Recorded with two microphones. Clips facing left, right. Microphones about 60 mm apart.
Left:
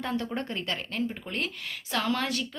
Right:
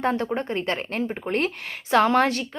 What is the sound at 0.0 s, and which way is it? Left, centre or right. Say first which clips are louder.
A woman's voice: right 7 dB; right.